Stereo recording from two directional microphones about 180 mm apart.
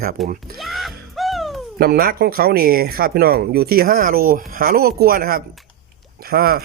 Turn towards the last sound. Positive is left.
turn(degrees=-55)  # may be behind; listen again after turning